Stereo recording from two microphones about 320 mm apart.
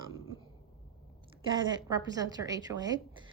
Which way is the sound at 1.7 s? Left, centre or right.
Centre.